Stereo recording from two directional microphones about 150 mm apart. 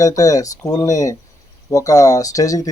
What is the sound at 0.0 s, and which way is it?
A man's voice, 25° left (ahead or behind).